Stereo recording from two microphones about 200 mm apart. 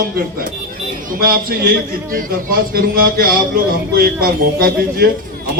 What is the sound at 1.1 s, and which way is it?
A man's voice, 45° right (ahead or behind).